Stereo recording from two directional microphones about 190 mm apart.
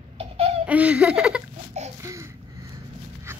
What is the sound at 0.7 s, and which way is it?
Laughter, 5° right (ahead or behind).